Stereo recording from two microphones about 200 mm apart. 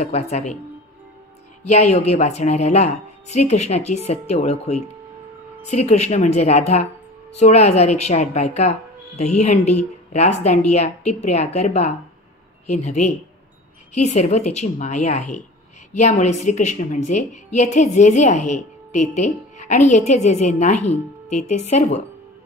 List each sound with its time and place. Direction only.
0.0 s a woman's voice: 30° left (ahead or behind)
1.6 s a woman's voice: 35° left (ahead or behind)